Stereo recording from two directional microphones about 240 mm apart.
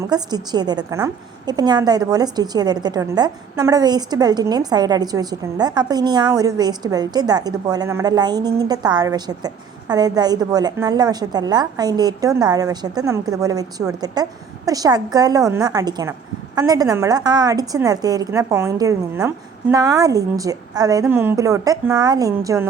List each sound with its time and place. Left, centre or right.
0.0 s a woman's voice: centre